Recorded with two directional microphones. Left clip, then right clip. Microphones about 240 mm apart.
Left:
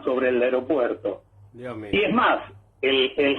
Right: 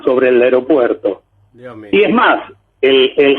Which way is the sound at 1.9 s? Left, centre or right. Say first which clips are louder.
Right 10 dB; right.